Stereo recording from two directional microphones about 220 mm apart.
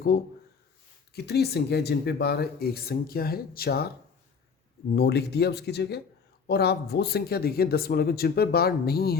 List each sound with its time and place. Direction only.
1.1 s speech: 45° left (ahead or behind)
4.9 s speech: 50° left (ahead or behind)